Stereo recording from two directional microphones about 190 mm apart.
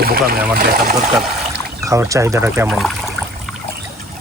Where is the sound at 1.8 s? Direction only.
15° right (ahead or behind).